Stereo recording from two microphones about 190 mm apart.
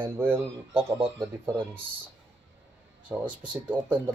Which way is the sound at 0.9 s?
30° right (ahead or behind).